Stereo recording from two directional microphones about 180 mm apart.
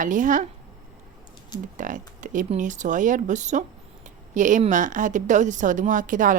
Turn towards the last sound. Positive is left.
turn(degrees=-45)  # may be behind; listen again after turning